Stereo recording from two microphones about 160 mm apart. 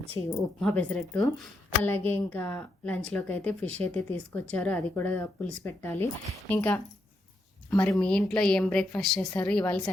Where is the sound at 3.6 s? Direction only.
40° right (ahead or behind).